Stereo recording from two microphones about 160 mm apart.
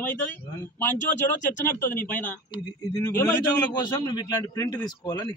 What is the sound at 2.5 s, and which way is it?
Speech, 25° left (ahead or behind).